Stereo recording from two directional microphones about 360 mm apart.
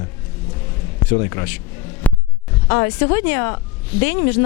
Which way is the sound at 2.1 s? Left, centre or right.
Centre.